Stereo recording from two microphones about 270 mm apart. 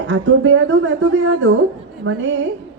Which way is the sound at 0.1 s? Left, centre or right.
Right.